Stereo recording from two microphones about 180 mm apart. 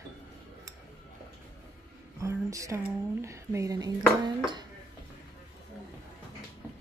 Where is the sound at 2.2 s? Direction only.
15° right (ahead or behind).